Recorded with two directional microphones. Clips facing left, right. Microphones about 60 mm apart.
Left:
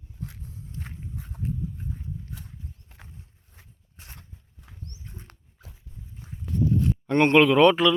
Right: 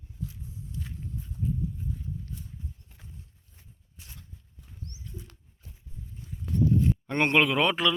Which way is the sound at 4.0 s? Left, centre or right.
Left.